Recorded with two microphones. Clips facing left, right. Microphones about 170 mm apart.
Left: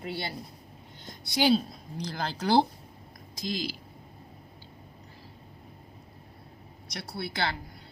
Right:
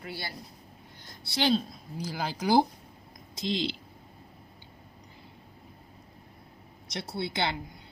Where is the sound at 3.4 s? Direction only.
25° right (ahead or behind).